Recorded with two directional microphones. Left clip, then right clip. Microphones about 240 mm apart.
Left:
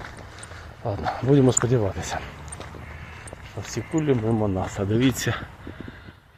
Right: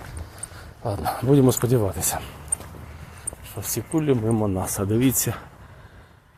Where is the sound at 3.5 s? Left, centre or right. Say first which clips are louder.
Right 1 dB; centre.